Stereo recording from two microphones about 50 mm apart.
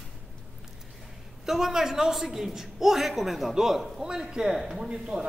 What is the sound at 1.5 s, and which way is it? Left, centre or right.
A woman's voice, centre.